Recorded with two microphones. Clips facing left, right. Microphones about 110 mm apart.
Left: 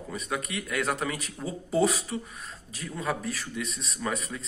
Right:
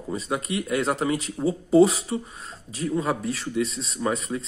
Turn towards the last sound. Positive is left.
turn(degrees=-25)  # may be behind; listen again after turning